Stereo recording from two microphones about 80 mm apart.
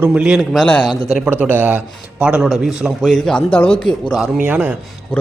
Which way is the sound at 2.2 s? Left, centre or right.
Centre.